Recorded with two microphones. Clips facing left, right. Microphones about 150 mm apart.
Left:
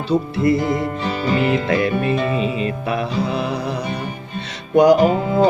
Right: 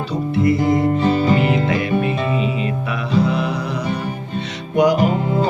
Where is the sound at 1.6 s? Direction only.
40° left (ahead or behind).